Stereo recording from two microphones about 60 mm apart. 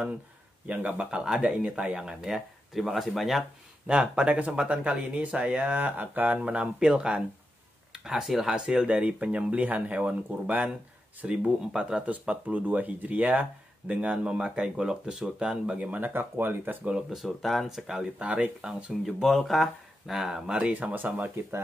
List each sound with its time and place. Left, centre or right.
0.7 s speech: right; by 3.4 s centre
3.8 s speech: centre
5.8 s speech: right; by 8.5 s centre
8.5 s speech: centre
12.4 s speech: right
16.1 s speech: right
17.1 s speech: centre
18.2 s speech: right
19.0 s speech: centre
20.7 s speech: right